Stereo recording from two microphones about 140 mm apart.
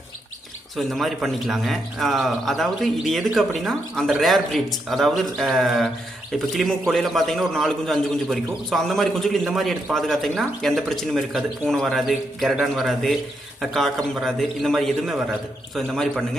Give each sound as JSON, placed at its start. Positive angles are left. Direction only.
{"t": 0.8, "sound": "a man's voice", "side_deg": 0}